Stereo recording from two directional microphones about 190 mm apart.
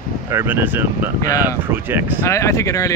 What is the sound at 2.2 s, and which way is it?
Speech, 15° left (ahead or behind).